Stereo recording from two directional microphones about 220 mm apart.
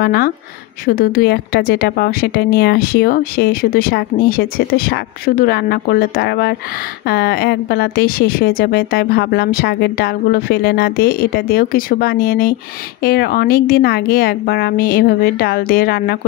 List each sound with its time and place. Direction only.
0.0 s speech: 45° left (ahead or behind)